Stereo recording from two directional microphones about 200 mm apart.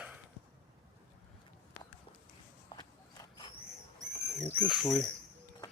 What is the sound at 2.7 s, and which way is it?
Walk, 20° left (ahead or behind).